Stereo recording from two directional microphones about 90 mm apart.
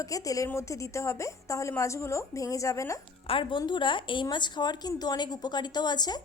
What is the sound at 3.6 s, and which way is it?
Speech, 60° left (ahead or behind).